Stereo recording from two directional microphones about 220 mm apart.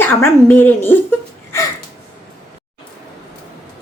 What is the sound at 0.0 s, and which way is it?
A woman's voice, 10° left (ahead or behind).